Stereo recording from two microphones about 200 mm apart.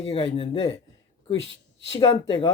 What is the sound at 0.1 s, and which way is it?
Speech, 25° left (ahead or behind).